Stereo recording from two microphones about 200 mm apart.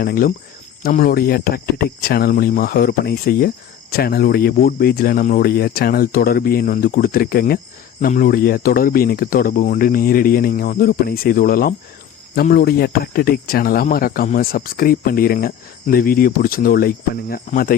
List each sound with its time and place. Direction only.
0.0 s speech: 45° left (ahead or behind)